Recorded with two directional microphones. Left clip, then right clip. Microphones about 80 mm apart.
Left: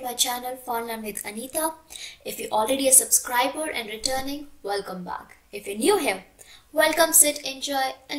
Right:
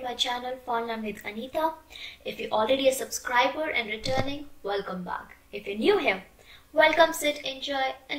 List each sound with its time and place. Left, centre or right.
0.0 s a woman's voice: left